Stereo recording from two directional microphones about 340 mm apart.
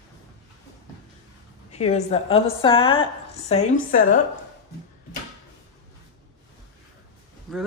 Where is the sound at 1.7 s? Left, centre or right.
Centre.